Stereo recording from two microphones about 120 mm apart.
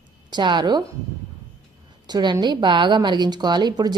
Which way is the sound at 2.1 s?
35° right (ahead or behind).